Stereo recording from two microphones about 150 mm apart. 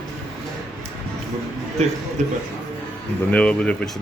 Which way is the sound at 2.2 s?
55° right (ahead or behind).